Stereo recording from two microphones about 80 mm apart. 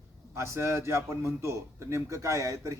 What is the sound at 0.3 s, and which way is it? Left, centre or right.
A man's voice, right.